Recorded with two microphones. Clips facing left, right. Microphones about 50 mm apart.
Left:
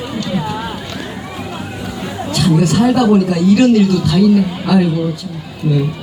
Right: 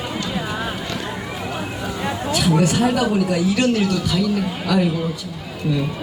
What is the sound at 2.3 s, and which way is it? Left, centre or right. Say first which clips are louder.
Speech: left 4 dB; centre.